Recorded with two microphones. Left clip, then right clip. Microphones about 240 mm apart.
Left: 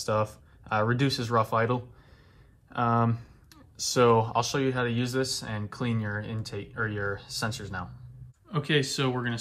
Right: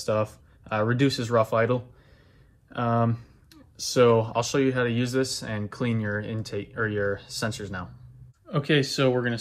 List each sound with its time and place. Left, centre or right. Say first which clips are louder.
0.0 s speech: right 2 dB; left
8.5 s speech: right 3 dB; centre